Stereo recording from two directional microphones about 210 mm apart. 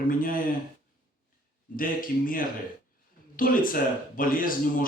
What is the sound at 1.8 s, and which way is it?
Speech, 40° left (ahead or behind).